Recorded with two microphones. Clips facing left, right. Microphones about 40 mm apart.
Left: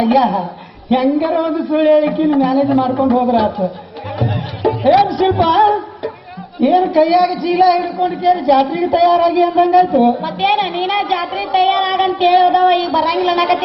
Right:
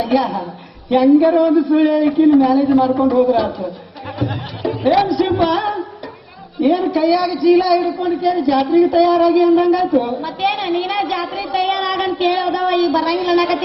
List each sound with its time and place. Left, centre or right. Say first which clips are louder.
0.1 s a woman's voice: left 4 dB; centre
2.0 s a woman's voice: right 1 dB; centre
4.2 s music: left 4 dB; centre
5.4 s a sound: left 5 dB; centre
6.6 s a man's voice: left 4 dB; centre
11.6 s a man's voice: left 5 dB; centre
11.9 s a man's voice: left 4 dB; centre